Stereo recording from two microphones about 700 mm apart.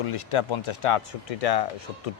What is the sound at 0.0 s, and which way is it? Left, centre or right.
Speech, left.